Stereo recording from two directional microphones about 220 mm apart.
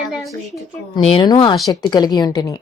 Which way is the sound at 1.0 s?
25° left (ahead or behind).